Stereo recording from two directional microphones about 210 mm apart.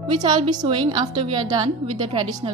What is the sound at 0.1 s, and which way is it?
A woman's voice, 20° right (ahead or behind).